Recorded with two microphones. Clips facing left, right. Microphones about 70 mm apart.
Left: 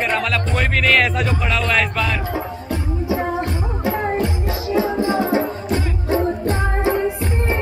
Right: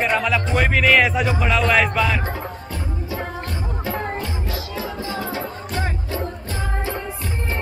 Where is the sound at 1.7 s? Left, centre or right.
Centre.